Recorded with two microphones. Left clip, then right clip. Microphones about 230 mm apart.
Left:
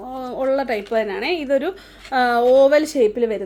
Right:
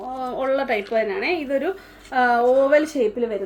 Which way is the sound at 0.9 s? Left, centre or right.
Left.